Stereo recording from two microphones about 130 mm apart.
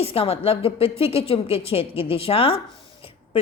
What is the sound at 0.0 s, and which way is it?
A woman's voice, 50° left (ahead or behind).